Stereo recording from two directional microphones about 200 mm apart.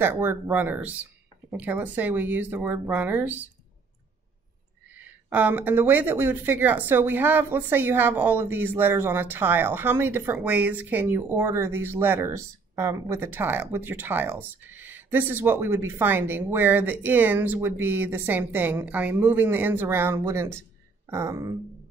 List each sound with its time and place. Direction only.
0.0 s speech: 10° right (ahead or behind)
4.9 s speech: 10° right (ahead or behind)